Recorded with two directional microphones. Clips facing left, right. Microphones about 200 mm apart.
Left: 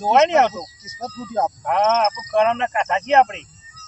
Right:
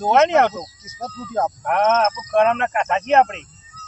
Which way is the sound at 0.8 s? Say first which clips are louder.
Left 1 dB; 10° left (ahead or behind).